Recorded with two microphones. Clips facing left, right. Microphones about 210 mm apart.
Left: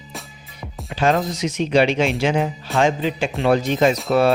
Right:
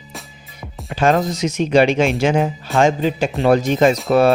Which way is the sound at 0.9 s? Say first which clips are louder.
Right 3 dB; 45° right (ahead or behind).